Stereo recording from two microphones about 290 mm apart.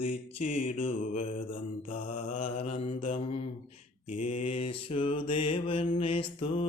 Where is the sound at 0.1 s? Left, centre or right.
Left.